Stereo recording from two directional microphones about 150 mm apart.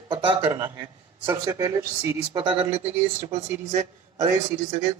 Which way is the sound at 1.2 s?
20° right (ahead or behind).